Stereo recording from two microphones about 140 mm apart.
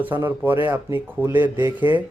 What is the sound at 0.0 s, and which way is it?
Speech, 15° right (ahead or behind).